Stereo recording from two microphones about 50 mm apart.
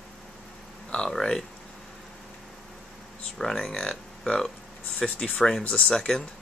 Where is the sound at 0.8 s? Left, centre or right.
Left.